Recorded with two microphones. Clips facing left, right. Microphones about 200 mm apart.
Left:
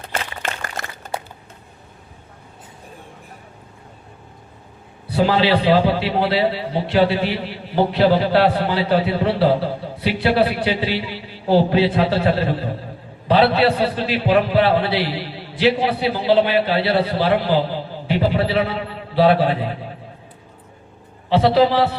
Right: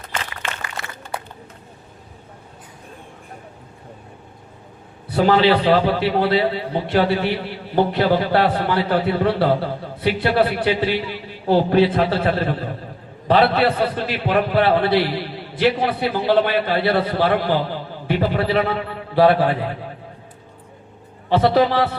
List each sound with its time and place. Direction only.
0.6 s a sound: 45° left (ahead or behind)
5.1 s a man's voice: 50° right (ahead or behind)
21.2 s a man's voice: 50° right (ahead or behind)